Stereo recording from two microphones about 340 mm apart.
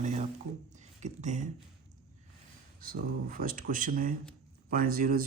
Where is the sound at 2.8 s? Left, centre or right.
Right.